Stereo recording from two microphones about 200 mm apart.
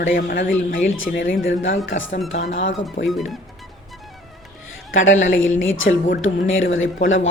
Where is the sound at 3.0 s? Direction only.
Centre (ahead or behind).